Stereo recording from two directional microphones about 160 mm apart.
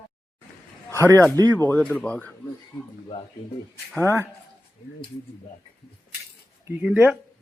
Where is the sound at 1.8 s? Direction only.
5° left (ahead or behind).